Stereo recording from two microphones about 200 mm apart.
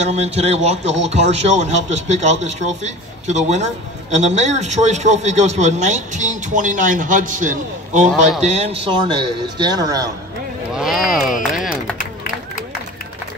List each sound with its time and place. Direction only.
0.0 s a man's voice: 35° right (ahead or behind)
10.8 s speech: centre (ahead or behind)
11.5 s a sound: centre (ahead or behind)